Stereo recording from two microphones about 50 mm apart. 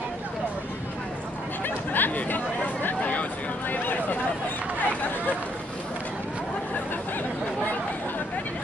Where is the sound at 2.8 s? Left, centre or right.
Left.